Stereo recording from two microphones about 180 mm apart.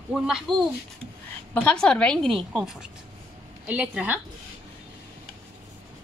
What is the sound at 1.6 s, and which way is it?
A woman's voice, 5° left (ahead or behind).